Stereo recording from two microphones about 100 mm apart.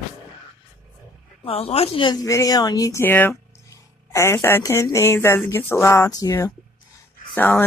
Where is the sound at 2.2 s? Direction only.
35° left (ahead or behind).